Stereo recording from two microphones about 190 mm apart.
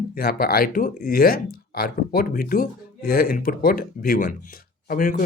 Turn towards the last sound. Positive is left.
turn(degrees=50)  # may be behind; listen again after turning